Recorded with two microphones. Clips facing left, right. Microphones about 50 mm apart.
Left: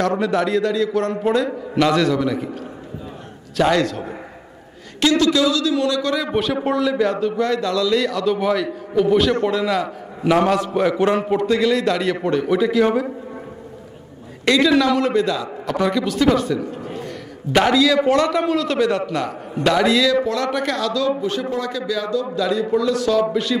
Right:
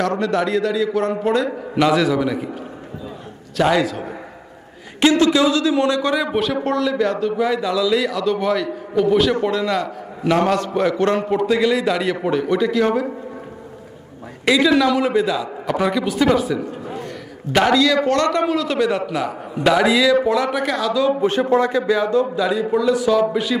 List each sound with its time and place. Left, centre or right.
0.0 s a man's voice: centre
3.5 s a man's voice: centre
5.0 s speech: right
6.5 s a man's voice: centre
14.4 s a man's voice: centre
21.2 s a man's voice: right
22.3 s a man's voice: centre